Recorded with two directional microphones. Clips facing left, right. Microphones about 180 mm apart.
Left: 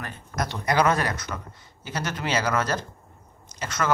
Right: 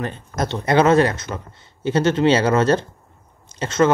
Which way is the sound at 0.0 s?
25° right (ahead or behind).